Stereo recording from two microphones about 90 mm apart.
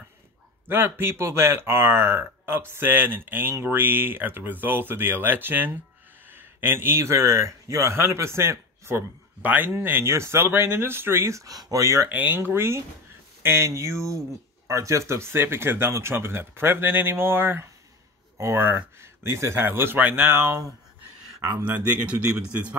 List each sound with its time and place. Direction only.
0.7 s speech: 25° right (ahead or behind)
12.1 s speech: 20° right (ahead or behind); by 21.6 s 35° right (ahead or behind)
21.6 s speech: 15° right (ahead or behind)